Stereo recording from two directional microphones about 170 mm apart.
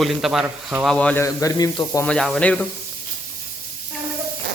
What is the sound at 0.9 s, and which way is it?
Speech, 10° left (ahead or behind).